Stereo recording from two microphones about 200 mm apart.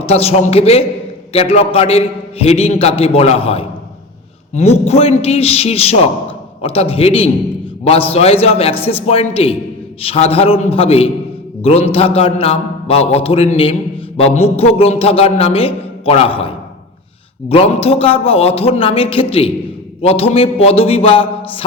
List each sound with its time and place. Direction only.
0.0 s a man's voice: 30° left (ahead or behind)